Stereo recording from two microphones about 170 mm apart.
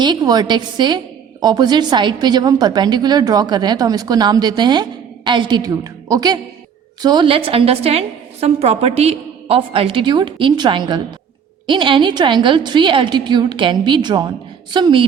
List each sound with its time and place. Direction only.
0.0 s a woman's voice: 25° right (ahead or behind)